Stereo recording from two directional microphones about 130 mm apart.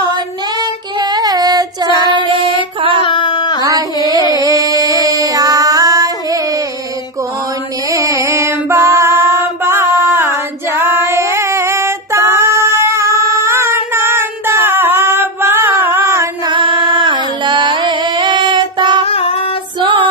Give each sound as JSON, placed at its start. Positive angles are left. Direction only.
{"t": 1.1, "sound": "child singing", "side_deg": -30}
{"t": 2.1, "sound": "female singing", "side_deg": -45}
{"t": 3.0, "sound": "a sound", "side_deg": 40}
{"t": 3.6, "sound": "music", "side_deg": -30}
{"t": 4.3, "sound": "a sound", "side_deg": -30}
{"t": 7.9, "sound": "female singing", "side_deg": -25}
{"t": 16.4, "sound": "music", "side_deg": -35}
{"t": 19.0, "sound": "child singing", "side_deg": 50}